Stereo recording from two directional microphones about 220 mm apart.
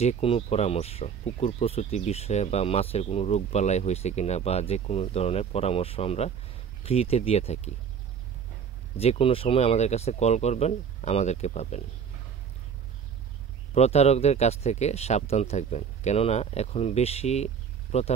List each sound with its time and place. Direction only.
0.0 s speech: 30° left (ahead or behind)
8.9 s speech: 25° left (ahead or behind)
13.7 s speech: 30° left (ahead or behind)